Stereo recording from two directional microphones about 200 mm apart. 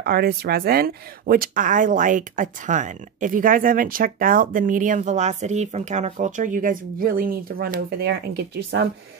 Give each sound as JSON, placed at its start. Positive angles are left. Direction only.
{"t": 0.0, "sound": "speech", "side_deg": -50}